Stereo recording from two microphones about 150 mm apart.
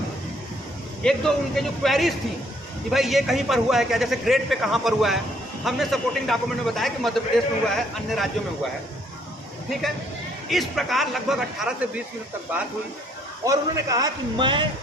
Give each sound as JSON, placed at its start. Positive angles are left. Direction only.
{"t": 1.0, "sound": "a man's voice", "side_deg": 0}
{"t": 10.5, "sound": "a man's voice", "side_deg": 0}
{"t": 13.4, "sound": "a man's voice", "side_deg": -25}